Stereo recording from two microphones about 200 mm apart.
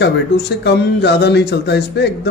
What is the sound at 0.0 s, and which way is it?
A man's voice, 60° left (ahead or behind).